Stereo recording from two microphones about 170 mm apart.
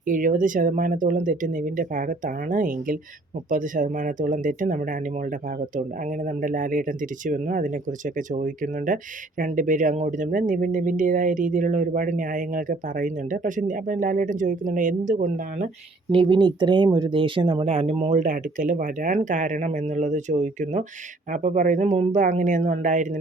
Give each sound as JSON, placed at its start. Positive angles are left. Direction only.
{"t": 0.0, "sound": "speech", "side_deg": -50}
{"t": 16.1, "sound": "speech", "side_deg": -30}